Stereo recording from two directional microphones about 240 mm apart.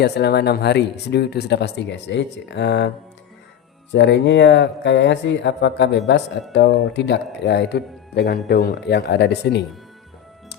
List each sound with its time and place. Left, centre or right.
0.0 s speech: left
3.9 s speech: left